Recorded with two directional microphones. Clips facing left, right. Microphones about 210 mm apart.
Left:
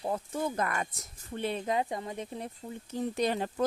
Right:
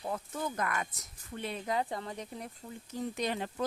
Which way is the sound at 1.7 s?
15° left (ahead or behind).